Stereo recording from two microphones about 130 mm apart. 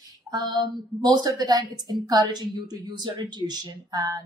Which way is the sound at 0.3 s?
35° right (ahead or behind).